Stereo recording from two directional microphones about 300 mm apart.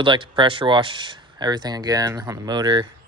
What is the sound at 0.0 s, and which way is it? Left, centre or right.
Speech, centre.